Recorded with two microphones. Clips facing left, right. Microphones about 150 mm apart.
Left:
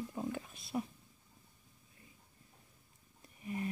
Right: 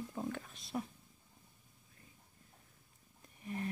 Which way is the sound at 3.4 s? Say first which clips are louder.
Left 2 dB; 10° left (ahead or behind).